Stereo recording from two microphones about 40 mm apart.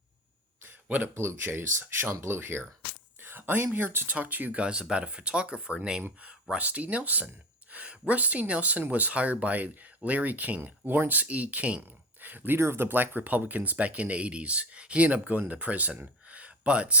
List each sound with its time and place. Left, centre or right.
1.0 s speech: right
2.0 s speech: right
3.2 s a sound: right
4.0 s speech: right
4.5 s speech: right
6.1 s speech: right
10.6 s speech: right
12.2 s speech: right
12.5 s speech: right
16.2 s a sound: right